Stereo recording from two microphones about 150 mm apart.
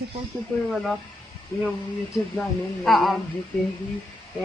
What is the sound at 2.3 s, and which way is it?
Speech, centre (ahead or behind).